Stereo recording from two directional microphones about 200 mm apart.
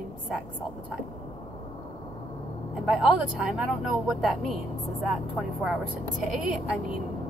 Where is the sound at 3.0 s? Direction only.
Centre (ahead or behind).